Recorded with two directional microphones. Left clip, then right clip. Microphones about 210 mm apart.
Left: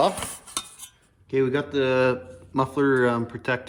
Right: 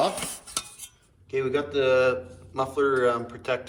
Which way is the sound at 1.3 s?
30° left (ahead or behind).